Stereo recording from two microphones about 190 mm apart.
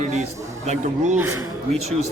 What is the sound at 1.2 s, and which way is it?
Speech, 15° right (ahead or behind).